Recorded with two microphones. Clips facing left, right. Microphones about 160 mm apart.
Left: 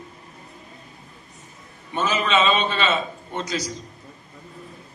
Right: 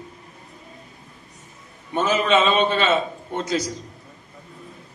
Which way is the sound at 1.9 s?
50° right (ahead or behind).